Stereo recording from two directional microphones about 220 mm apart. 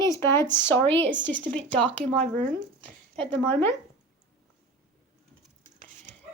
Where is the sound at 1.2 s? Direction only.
55° right (ahead or behind).